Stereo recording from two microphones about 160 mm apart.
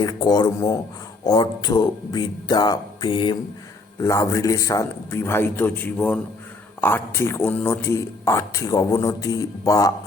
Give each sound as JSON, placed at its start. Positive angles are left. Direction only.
{"t": 0.0, "sound": "a man's voice", "side_deg": 25}
{"t": 4.0, "sound": "a man's voice", "side_deg": 20}